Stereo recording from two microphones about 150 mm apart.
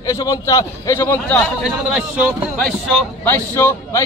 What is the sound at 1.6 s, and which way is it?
A man's voice, 5° right (ahead or behind).